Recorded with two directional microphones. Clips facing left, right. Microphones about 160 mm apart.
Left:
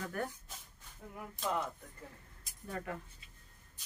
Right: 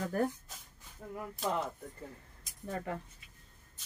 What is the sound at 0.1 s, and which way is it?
Speech, 35° right (ahead or behind).